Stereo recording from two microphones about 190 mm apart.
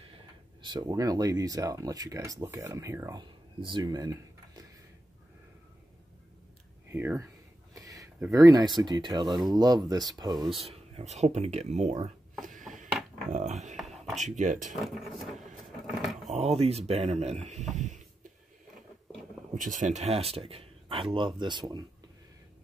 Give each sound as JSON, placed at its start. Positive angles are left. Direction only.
{"t": 0.6, "sound": "speech", "side_deg": -20}
{"t": 6.9, "sound": "speech", "side_deg": -10}
{"t": 10.6, "sound": "speech", "side_deg": -35}
{"t": 12.6, "sound": "a sound", "side_deg": 0}
{"t": 13.3, "sound": "dog", "side_deg": -40}
{"t": 13.7, "sound": "a sound", "side_deg": 0}
{"t": 14.1, "sound": "speech", "side_deg": -40}
{"t": 14.9, "sound": "a sound", "side_deg": 0}
{"t": 16.3, "sound": "speech", "side_deg": -35}
{"t": 19.5, "sound": "speech", "side_deg": -40}